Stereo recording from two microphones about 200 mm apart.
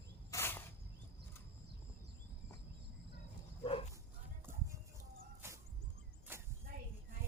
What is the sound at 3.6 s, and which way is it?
Bow-wow, 30° left (ahead or behind).